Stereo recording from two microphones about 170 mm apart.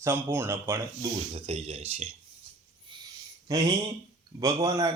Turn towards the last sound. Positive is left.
turn(degrees=-20)  # may be behind; listen again after turning